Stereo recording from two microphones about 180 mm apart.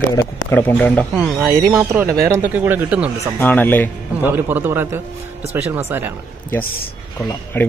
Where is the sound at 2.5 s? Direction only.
10° right (ahead or behind).